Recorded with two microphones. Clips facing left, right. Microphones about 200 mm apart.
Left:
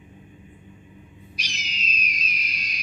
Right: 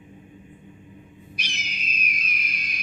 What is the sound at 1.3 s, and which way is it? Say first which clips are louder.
Wild animals: right 1 dB; 55° right (ahead or behind).